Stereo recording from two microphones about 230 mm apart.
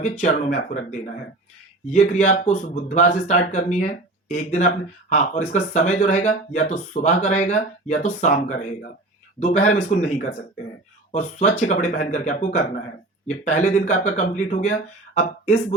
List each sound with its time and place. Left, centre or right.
0.0 s speech: left